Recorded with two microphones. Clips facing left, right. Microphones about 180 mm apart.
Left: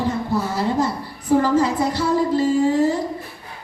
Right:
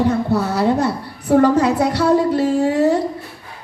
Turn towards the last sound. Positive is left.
turn(degrees=-70)  # may be behind; listen again after turning